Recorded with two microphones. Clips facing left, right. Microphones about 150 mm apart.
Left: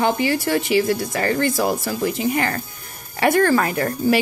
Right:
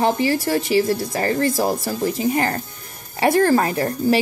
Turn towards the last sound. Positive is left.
turn(degrees=-30)  # may be behind; listen again after turning